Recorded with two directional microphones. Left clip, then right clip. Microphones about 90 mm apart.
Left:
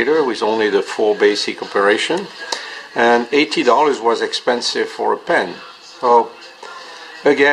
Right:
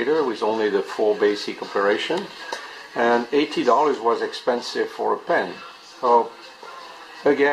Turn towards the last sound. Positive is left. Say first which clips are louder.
# left 5 dB
turn(degrees=45)  # may be behind; listen again after turning